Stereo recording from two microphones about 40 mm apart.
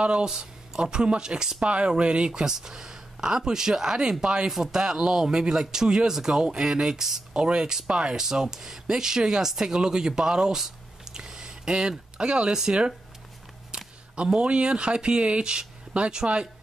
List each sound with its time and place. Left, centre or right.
0.0 s speech: right
11.1 s a sound: centre
12.2 s speech: right
14.1 s speech: right